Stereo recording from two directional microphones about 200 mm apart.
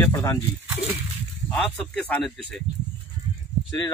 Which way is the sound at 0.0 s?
15° left (ahead or behind).